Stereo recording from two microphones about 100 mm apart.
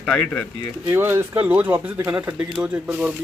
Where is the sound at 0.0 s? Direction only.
10° left (ahead or behind).